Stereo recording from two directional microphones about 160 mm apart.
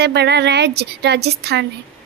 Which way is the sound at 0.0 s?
90° right.